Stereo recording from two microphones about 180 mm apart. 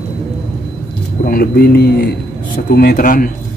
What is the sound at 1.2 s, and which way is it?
A man's voice, 55° left (ahead or behind).